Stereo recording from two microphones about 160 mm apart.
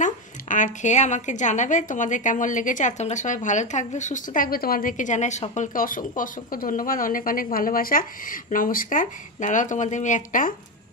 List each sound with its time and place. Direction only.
0.0 s a woman's voice: 50° left (ahead or behind)